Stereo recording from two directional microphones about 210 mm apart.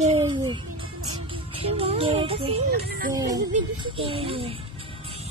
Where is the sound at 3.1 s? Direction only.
15° right (ahead or behind).